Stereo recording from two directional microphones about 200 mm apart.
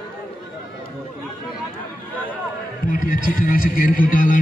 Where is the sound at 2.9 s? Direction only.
45° left (ahead or behind).